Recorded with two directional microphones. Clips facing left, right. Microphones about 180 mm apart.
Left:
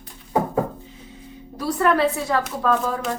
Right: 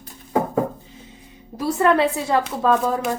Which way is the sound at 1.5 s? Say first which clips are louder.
Right 2 dB; 25° right (ahead or behind).